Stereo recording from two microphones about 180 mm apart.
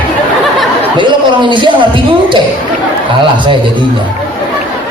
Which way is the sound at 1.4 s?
25° right (ahead or behind).